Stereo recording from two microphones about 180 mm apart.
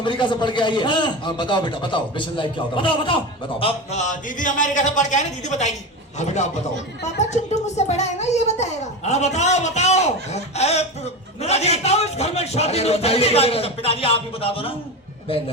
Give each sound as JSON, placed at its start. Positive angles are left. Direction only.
{"t": 0.0, "sound": "a man's voice", "side_deg": 25}
{"t": 3.6, "sound": "a man's voice", "side_deg": 40}